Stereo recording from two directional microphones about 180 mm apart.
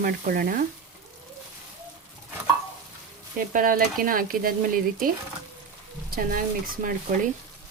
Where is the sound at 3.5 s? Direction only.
50° right (ahead or behind).